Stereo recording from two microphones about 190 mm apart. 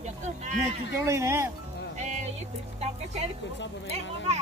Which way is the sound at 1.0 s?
15° right (ahead or behind).